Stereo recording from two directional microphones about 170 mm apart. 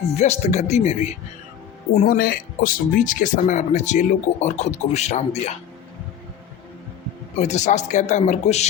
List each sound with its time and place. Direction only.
0.1 s speech: 40° left (ahead or behind)
2.0 s speech: 60° left (ahead or behind); by 5.5 s 40° left (ahead or behind)
7.3 s speech: 40° left (ahead or behind)